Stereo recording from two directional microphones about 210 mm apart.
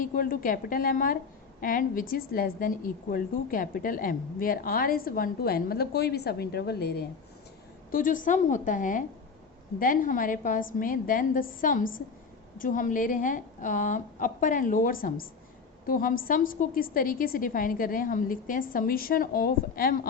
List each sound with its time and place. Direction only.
0.0 s a woman's voice: 40° left (ahead or behind)